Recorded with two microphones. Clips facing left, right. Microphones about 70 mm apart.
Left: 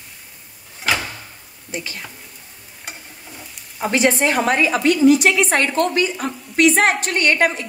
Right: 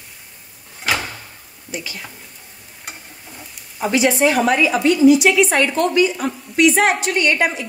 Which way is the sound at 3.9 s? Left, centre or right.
Left.